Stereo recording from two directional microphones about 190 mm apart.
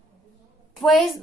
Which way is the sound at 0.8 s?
Centre (ahead or behind).